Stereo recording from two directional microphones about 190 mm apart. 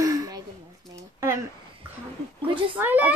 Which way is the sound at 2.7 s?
10° right (ahead or behind).